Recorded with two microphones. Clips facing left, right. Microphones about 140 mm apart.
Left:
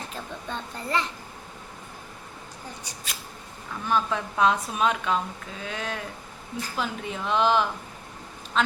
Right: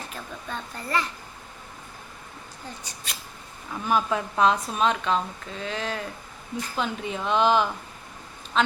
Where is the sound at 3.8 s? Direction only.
10° right (ahead or behind).